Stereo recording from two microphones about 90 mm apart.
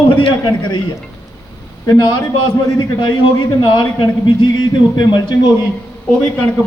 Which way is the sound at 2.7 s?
60° left (ahead or behind).